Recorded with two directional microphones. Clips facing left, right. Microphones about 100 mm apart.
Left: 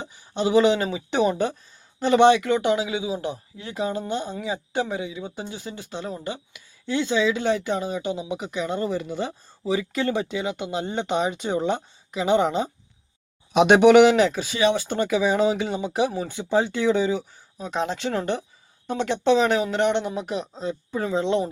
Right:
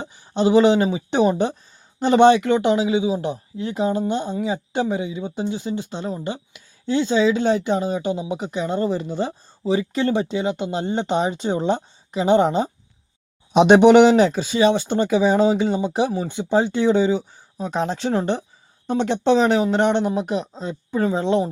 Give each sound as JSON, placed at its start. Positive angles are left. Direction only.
{"t": 0.0, "sound": "a sound", "side_deg": -30}
{"t": 0.9, "sound": "speech", "side_deg": -30}
{"t": 18.1, "sound": "speech", "side_deg": -25}